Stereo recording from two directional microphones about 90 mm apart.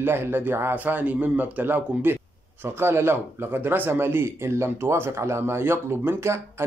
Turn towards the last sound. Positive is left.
turn(degrees=-30)  # may be behind; listen again after turning